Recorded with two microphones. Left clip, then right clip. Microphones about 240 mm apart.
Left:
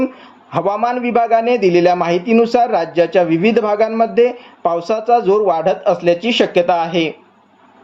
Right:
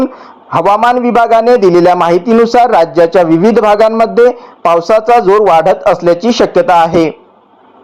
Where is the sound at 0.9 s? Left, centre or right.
Centre.